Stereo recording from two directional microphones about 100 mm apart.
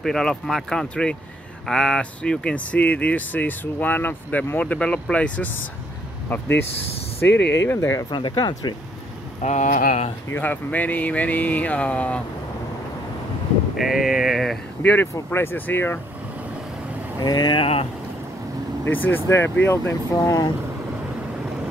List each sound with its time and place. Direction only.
0.0 s speech: 5° left (ahead or behind)
7.2 s speech: 25° left (ahead or behind)
8.1 s speech: 50° left (ahead or behind)
10.3 s speech: 15° left (ahead or behind)
13.7 s speech: centre (ahead or behind)
14.8 s speech: 20° left (ahead or behind)
17.2 s speech: 45° left (ahead or behind)
17.6 s speech: 75° left (ahead or behind)
18.9 s speech: 20° left (ahead or behind); by 20.4 s 35° left (ahead or behind)